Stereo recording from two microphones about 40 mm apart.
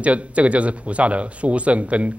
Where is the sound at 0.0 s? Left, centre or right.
Right.